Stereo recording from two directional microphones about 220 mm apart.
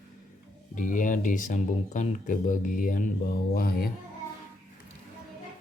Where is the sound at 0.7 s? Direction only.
35° left (ahead or behind).